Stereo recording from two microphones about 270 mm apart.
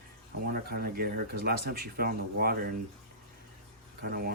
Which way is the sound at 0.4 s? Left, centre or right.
Right.